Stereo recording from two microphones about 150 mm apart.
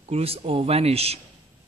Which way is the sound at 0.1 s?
40° right (ahead or behind).